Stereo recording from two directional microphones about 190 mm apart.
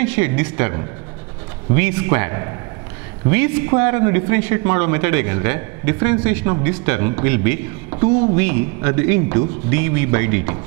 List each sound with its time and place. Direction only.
0.0 s a man's voice: 10° right (ahead or behind)